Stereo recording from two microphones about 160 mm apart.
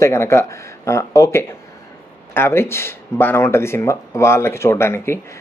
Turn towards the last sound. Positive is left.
turn(degrees=15)  # may be behind; listen again after turning